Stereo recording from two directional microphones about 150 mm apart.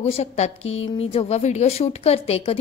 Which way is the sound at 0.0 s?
45° left (ahead or behind).